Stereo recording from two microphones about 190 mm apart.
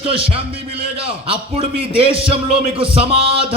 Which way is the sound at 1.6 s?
30° right (ahead or behind).